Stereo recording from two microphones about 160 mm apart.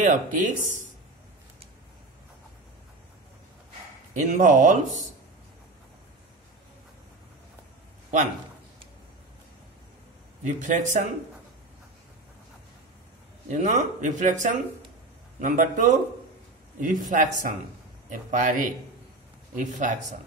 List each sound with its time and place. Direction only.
0.0 s speech: 55° right (ahead or behind)
4.1 s speech: 50° right (ahead or behind)
10.4 s speech: 55° right (ahead or behind)
13.5 s speech: 50° right (ahead or behind)